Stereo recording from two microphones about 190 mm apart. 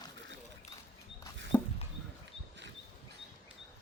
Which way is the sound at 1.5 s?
10° left (ahead or behind).